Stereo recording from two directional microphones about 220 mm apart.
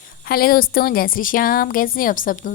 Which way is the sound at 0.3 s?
45° left (ahead or behind).